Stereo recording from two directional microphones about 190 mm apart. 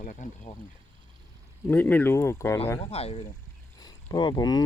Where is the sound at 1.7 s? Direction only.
10° left (ahead or behind).